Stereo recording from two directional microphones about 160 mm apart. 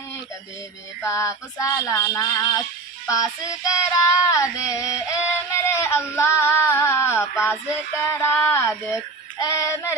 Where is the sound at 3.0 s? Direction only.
20° left (ahead or behind).